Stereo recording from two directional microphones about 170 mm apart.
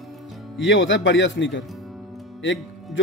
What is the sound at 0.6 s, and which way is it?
Speech, 90° left.